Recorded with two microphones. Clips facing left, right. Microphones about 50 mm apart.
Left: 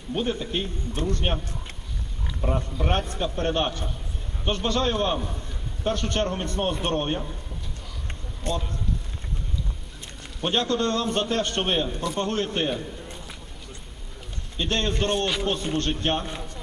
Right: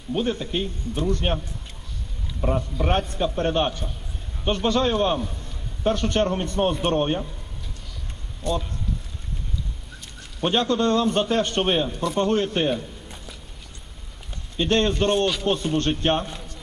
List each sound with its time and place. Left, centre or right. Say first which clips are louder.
0.1 s a man's voice: right 2 dB; centre
2.4 s a man's voice: right 3 dB; centre
8.4 s speech: right 3 dB; left
10.4 s a man's voice: right 3 dB; centre
12.5 s a sound: right 3 dB; centre
14.6 s a man's voice: right 5 dB; centre
15.5 s speech: right 4 dB; right
15.8 s a man's voice: right 3 dB; centre